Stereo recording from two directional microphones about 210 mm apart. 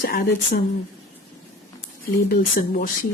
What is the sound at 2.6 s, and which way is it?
Speech, 40° left (ahead or behind).